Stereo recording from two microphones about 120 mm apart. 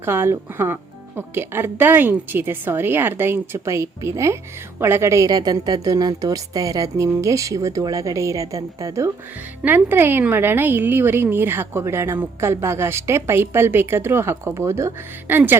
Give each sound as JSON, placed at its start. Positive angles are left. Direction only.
{"t": 0.0, "sound": "a woman's voice", "side_deg": -20}
{"t": 9.6, "sound": "a woman's voice", "side_deg": -15}